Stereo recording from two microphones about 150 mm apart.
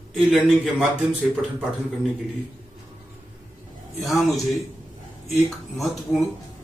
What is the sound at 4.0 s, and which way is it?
Speech, centre (ahead or behind).